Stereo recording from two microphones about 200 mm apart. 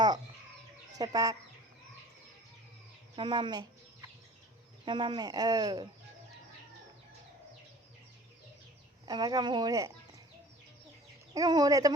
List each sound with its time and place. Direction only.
0.9 s speech: 20° right (ahead or behind)
3.2 s chicken: 25° right (ahead or behind)
4.9 s speech: 25° right (ahead or behind)
9.0 s speech: 20° right (ahead or behind)
11.3 s speech: 20° right (ahead or behind)